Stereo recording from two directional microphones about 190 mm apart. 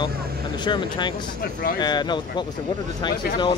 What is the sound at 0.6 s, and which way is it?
A man's voice, 25° left (ahead or behind).